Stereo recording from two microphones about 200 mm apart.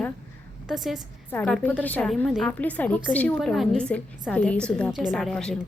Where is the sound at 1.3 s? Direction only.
10° left (ahead or behind).